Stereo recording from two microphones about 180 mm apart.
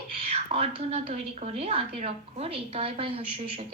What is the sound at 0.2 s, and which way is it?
Whispering, 35° right (ahead or behind).